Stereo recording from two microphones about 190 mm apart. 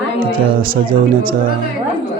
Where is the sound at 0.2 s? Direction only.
50° right (ahead or behind).